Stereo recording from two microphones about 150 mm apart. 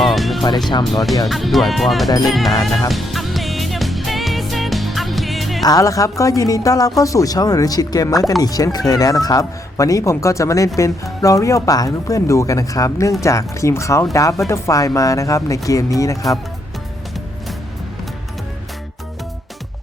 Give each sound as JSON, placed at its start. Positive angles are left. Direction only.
{"t": 0.0, "sound": "music", "side_deg": 0}
{"t": 1.3, "sound": "speech", "side_deg": 0}
{"t": 2.9, "sound": "music", "side_deg": 0}
{"t": 5.6, "sound": "a woman's voice", "side_deg": 25}